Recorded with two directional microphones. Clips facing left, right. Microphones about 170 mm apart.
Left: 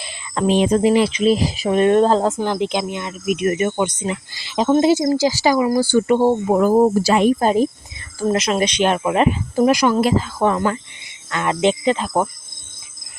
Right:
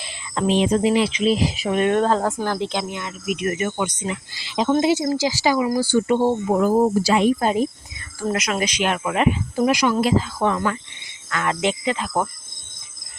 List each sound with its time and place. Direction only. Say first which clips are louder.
0.3 s speech: left 3 dB; 50° left (ahead or behind)
5.8 s speech: left 3 dB; 65° left (ahead or behind); by 10.6 s 45° left (ahead or behind)
11.3 s speech: left 4 dB; 25° left (ahead or behind)